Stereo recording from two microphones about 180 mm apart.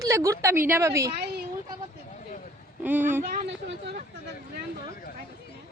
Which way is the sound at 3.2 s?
50° right (ahead or behind).